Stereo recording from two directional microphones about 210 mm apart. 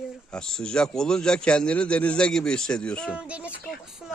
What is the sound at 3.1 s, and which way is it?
A child's voice, 5° right (ahead or behind).